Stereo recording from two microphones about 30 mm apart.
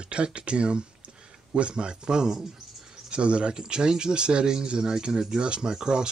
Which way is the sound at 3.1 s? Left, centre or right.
Right.